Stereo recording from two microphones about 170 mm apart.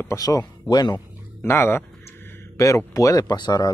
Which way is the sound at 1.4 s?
15° left (ahead or behind).